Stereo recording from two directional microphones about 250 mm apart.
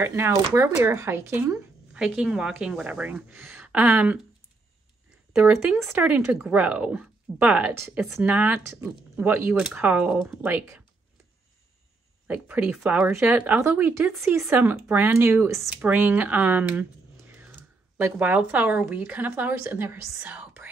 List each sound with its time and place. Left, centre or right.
0.0 s speech: centre
5.4 s speech: centre
12.3 s speech: centre